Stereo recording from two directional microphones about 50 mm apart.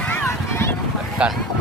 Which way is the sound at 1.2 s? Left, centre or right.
Right.